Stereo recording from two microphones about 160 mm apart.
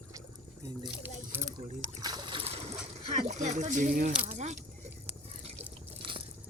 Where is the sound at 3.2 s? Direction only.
45° right (ahead or behind).